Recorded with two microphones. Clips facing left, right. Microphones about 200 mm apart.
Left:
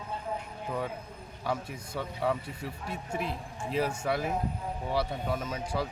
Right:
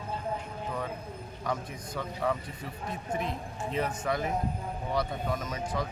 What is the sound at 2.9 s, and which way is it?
Speech, 5° left (ahead or behind).